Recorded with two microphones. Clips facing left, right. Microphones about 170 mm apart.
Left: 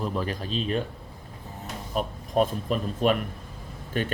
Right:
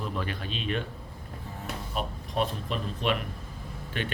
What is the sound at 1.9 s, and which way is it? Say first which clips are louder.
Speech: left 7 dB; 45° left (ahead or behind).